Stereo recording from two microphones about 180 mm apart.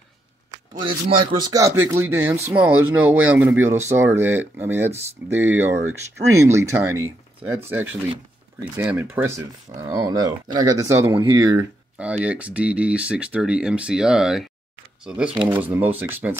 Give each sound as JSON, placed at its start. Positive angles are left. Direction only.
{"t": 0.8, "sound": "speech", "side_deg": -30}
{"t": 9.4, "sound": "speech", "side_deg": -20}
{"t": 12.0, "sound": "speech", "side_deg": -5}